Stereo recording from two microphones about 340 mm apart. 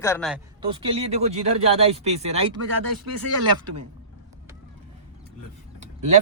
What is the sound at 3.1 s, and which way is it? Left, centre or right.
Speech, right.